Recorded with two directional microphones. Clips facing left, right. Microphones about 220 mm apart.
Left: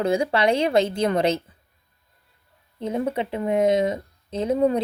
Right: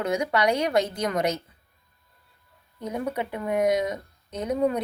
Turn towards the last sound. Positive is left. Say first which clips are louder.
# left 4 dB
turn(degrees=30)  # may be behind; listen again after turning